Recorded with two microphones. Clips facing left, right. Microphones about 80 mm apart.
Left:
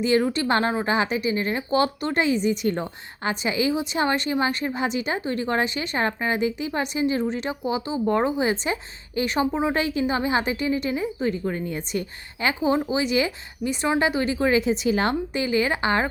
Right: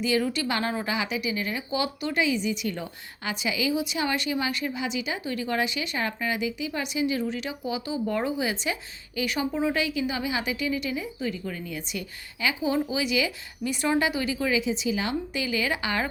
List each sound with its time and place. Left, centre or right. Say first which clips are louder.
0.0 s speech: left 4 dB; left
13.7 s speech: left 2 dB; left
15.3 s speech: left 5 dB; left